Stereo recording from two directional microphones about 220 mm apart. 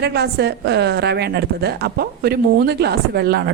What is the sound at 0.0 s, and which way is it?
Speech, 50° right (ahead or behind).